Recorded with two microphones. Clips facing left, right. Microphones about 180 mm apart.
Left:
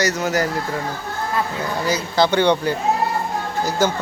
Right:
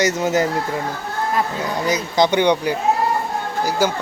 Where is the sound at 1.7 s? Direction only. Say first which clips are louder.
Even; 20° right (ahead or behind).